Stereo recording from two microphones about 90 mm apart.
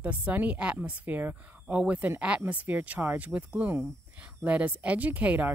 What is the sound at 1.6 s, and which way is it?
Speech, 10° right (ahead or behind).